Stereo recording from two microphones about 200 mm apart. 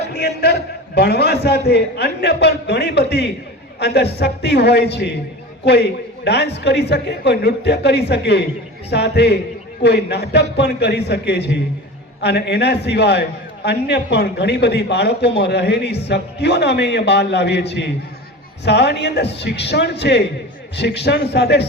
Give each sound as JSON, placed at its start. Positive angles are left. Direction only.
{"t": 0.1, "sound": "a man's voice", "side_deg": 55}